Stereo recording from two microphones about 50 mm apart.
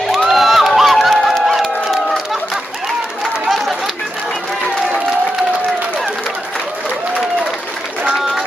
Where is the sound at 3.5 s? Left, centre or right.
Centre.